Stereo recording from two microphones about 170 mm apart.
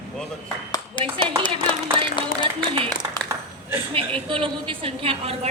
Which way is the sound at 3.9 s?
30° right (ahead or behind).